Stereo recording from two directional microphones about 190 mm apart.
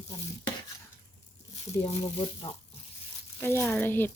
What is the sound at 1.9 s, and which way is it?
Speech, 30° left (ahead or behind).